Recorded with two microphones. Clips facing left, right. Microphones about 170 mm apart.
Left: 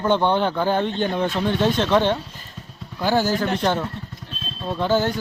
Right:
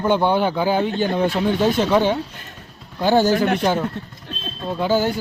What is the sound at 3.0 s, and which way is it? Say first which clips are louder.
Speech: right 4 dB; 20° right (ahead or behind).